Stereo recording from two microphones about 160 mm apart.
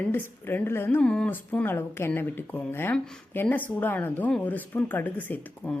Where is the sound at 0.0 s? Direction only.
15° left (ahead or behind).